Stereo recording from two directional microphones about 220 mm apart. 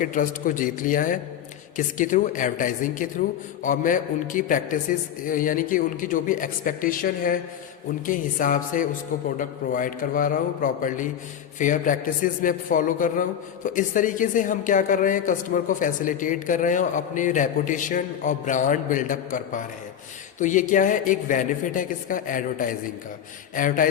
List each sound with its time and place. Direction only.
0.0 s a woman's voice: 35° left (ahead or behind)